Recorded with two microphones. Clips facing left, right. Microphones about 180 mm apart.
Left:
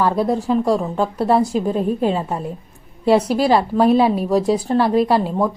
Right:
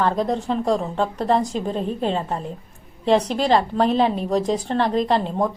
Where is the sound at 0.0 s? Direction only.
10° left (ahead or behind).